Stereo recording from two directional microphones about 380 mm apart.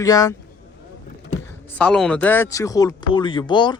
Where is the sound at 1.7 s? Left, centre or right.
Centre.